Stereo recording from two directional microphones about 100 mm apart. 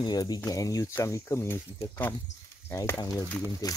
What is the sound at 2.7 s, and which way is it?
Speech, 35° left (ahead or behind).